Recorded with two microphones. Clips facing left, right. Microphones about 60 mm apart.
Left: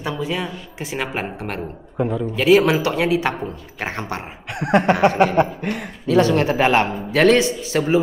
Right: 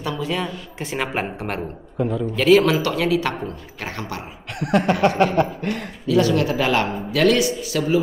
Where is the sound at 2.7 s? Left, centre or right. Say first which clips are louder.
Left 1 dB; left.